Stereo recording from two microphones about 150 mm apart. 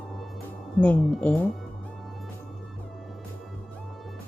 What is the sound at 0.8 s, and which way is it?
Speech, 10° left (ahead or behind).